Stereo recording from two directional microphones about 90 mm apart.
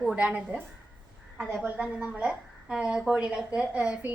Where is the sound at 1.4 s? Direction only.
Centre (ahead or behind).